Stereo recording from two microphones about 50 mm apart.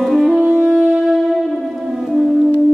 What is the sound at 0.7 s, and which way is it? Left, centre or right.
Wind instrument, right.